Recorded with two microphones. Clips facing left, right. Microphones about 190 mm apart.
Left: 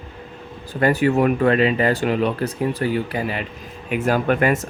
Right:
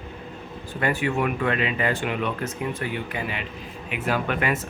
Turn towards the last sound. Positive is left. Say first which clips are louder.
# left 6 dB
turn(degrees=45)  # may be behind; listen again after turning